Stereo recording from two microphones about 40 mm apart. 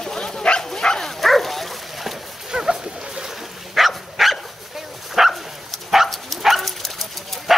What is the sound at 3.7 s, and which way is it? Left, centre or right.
Bow-wow, centre.